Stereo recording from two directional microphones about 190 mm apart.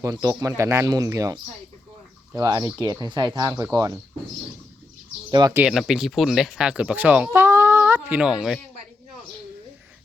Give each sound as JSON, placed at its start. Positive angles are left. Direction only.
{"t": 0.0, "sound": "speech", "side_deg": -15}
{"t": 5.3, "sound": "speech", "side_deg": -20}
{"t": 5.6, "sound": "speech", "side_deg": -5}